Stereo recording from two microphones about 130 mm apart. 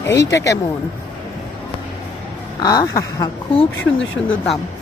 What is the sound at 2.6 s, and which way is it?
Speech, 30° left (ahead or behind).